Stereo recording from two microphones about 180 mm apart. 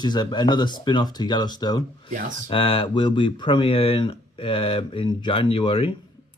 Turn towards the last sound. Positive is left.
turn(degrees=30)  # may be behind; listen again after turning